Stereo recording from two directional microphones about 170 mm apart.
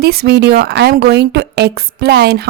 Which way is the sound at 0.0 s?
65° right (ahead or behind).